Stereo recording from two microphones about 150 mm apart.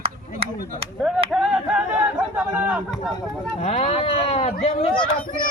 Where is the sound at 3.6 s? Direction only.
45° left (ahead or behind).